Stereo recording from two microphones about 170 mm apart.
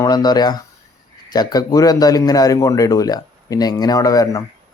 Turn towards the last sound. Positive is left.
turn(degrees=20)  # may be behind; listen again after turning